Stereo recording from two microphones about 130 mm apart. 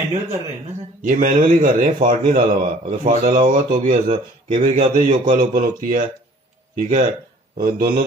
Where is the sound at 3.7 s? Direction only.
70° right (ahead or behind); by 6.0 s 90° right.